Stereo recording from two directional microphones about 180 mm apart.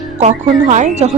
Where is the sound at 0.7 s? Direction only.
40° right (ahead or behind).